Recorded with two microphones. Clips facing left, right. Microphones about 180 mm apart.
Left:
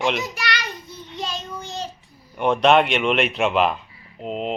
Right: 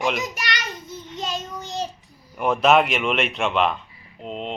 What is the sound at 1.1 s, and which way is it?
Child singing, 20° right (ahead or behind).